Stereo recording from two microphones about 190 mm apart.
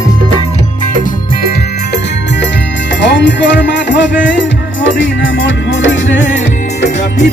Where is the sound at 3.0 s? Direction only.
70° left (ahead or behind).